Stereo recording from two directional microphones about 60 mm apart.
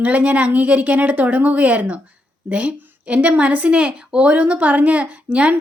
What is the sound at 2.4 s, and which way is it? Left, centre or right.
Speech, right.